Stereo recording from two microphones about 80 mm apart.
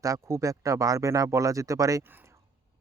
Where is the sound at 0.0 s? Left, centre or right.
Right.